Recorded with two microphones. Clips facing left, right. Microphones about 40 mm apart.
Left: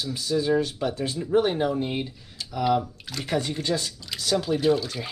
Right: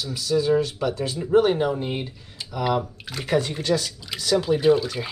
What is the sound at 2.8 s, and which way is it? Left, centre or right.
Speech, centre.